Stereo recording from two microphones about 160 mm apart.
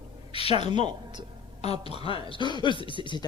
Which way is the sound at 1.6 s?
40° left (ahead or behind).